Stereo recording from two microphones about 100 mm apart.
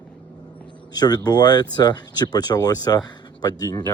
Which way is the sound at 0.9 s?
45° left (ahead or behind).